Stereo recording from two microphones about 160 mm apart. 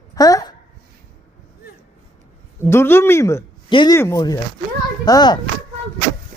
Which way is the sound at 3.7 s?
30° left (ahead or behind).